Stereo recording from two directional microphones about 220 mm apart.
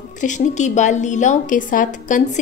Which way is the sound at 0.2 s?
35° left (ahead or behind).